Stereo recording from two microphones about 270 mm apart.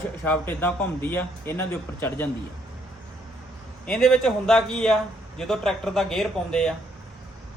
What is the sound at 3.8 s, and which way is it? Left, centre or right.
A man's voice, centre.